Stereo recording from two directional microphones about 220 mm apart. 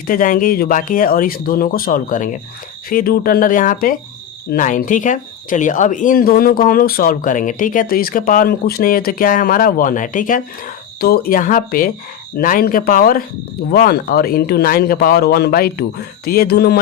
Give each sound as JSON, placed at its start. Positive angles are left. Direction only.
{"t": 0.1, "sound": "speech", "side_deg": 40}